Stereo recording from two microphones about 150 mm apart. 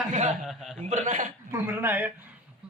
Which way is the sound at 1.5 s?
15° right (ahead or behind).